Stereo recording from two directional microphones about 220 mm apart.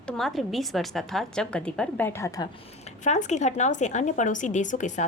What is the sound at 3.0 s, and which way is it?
A woman's voice, 35° left (ahead or behind).